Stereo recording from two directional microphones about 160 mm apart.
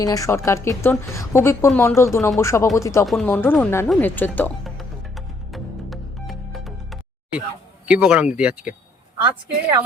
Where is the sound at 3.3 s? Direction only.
15° left (ahead or behind).